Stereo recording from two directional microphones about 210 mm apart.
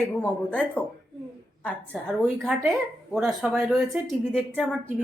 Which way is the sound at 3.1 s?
Centre (ahead or behind).